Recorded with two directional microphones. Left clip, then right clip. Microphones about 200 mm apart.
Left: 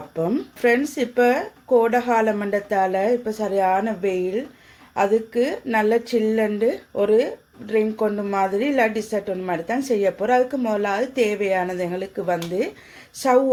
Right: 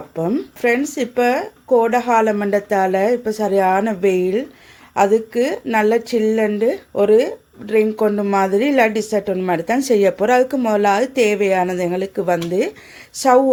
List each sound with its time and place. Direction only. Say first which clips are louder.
0.2 s speech: right 2 dB; 20° right (ahead or behind)